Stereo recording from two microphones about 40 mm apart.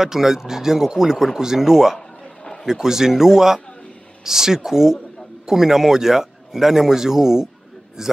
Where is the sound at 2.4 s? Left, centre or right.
Centre.